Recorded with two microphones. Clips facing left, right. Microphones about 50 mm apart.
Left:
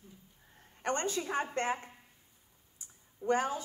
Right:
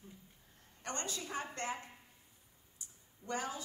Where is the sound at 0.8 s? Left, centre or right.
Left.